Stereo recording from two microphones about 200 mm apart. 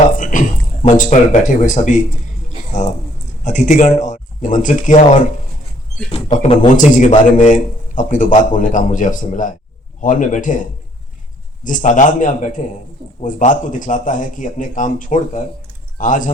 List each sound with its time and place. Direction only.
0.2 s speech: 40° left (ahead or behind)
3.4 s speech: 35° left (ahead or behind)
6.1 s a man's voice: 30° left (ahead or behind)